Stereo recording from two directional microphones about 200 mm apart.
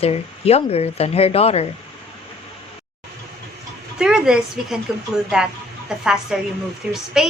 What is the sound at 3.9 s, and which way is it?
Speech, 5° right (ahead or behind).